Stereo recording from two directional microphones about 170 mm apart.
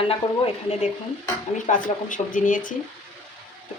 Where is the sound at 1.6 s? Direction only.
50° left (ahead or behind).